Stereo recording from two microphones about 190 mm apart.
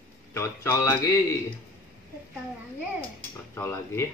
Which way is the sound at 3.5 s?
15° left (ahead or behind).